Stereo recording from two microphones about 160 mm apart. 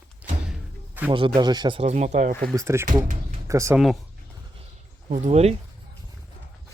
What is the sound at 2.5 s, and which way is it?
Speech, 20° right (ahead or behind).